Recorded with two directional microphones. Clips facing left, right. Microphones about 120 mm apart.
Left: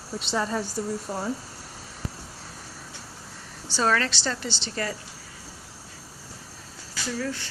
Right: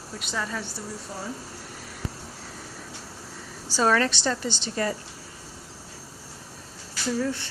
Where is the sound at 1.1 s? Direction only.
55° left (ahead or behind).